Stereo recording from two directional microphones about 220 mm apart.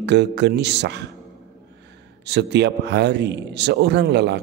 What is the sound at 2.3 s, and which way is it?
A man's voice, 50° right (ahead or behind).